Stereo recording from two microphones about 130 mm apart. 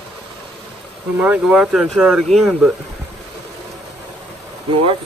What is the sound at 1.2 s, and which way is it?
Speech, 5° right (ahead or behind).